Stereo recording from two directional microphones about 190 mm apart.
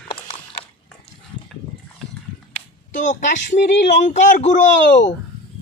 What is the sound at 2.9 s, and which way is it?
Speech, 40° left (ahead or behind).